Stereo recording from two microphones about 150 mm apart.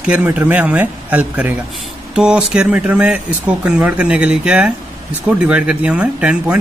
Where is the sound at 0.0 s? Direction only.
10° right (ahead or behind).